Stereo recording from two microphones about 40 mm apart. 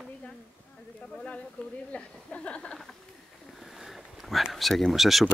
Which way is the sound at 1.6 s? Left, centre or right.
Left.